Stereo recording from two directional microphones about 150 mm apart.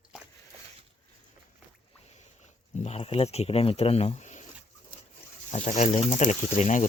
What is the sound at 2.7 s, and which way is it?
Speech, 45° left (ahead or behind).